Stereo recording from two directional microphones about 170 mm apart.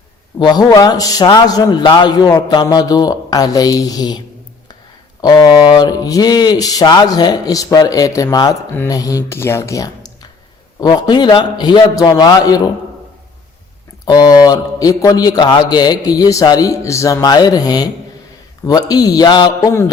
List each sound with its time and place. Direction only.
0.3 s a man's voice: 25° left (ahead or behind)
5.2 s a man's voice: 25° left (ahead or behind)
14.0 s a man's voice: 20° left (ahead or behind)